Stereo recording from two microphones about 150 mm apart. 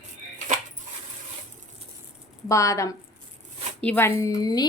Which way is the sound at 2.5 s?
20° left (ahead or behind).